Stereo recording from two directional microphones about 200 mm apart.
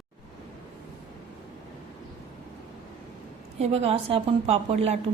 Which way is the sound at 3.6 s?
30° right (ahead or behind).